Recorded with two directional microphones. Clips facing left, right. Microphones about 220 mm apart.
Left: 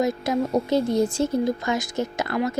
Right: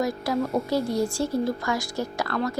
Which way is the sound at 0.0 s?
20° left (ahead or behind).